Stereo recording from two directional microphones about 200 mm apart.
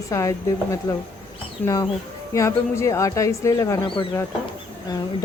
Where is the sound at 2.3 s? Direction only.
15° left (ahead or behind).